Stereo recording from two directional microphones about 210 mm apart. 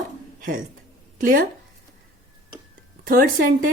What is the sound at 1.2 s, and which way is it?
Speech, 40° right (ahead or behind).